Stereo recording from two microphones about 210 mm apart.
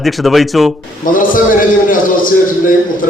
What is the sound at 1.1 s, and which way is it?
A man's voice, 40° left (ahead or behind).